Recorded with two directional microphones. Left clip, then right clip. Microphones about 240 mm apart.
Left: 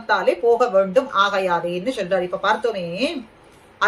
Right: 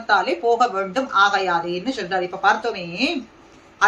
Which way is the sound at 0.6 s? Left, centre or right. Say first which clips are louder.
Left 3 dB; centre.